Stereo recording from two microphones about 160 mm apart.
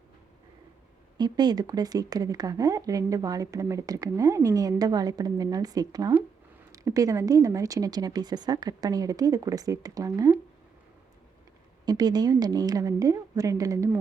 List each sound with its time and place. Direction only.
1.2 s speech: 25° right (ahead or behind)
11.9 s speech: 25° right (ahead or behind)